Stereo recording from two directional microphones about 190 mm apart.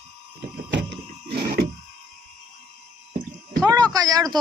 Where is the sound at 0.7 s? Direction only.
70° right (ahead or behind).